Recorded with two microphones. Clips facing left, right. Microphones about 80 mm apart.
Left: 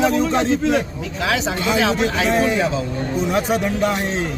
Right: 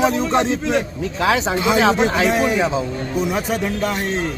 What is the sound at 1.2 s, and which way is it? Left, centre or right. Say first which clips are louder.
A man's voice: right 3 dB; right.